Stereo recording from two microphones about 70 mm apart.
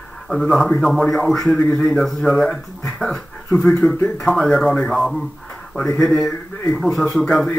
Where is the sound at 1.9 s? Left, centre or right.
Centre.